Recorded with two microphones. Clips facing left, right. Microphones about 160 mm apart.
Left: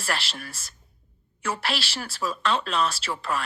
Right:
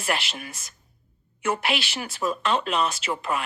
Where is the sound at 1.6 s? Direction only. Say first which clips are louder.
Right 3 dB; 20° right (ahead or behind).